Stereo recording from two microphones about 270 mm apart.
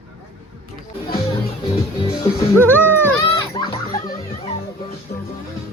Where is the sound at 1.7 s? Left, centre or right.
Left.